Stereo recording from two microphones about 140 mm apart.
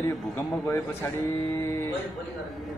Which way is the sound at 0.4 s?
20° left (ahead or behind).